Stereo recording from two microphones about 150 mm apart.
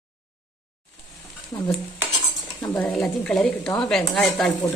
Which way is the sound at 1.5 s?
20° left (ahead or behind).